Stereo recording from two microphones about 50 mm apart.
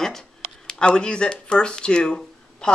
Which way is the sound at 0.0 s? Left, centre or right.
Centre.